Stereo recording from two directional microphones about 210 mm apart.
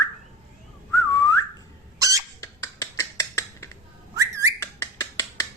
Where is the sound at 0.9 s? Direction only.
15° left (ahead or behind).